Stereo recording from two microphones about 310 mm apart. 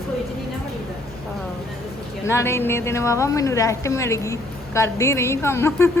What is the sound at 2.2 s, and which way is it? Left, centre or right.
A woman's voice, centre.